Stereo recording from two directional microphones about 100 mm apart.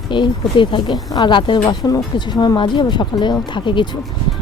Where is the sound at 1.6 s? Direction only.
40° left (ahead or behind); by 3.9 s 55° left (ahead or behind).